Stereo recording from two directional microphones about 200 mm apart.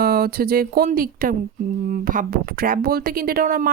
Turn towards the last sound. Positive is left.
turn(degrees=-45)  # may be behind; listen again after turning